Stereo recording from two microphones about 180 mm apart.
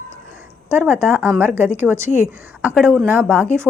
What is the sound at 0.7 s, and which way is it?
A woman's voice, 10° right (ahead or behind).